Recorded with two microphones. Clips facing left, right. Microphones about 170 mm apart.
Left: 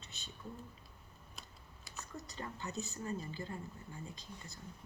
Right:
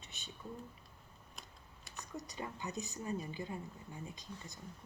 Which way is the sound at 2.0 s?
15° right (ahead or behind).